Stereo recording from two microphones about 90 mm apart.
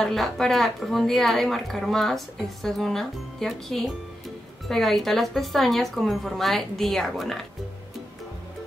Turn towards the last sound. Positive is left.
turn(degrees=0)  # may be behind; listen again after turning